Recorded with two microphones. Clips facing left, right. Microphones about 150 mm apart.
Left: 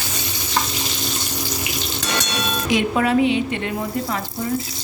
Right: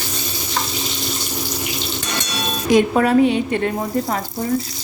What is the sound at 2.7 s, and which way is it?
Speech, 45° right (ahead or behind).